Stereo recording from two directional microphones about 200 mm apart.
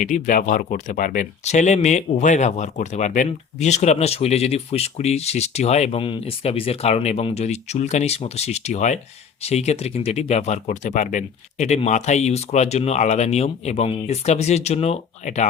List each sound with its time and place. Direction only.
0.0 s speech: 40° left (ahead or behind)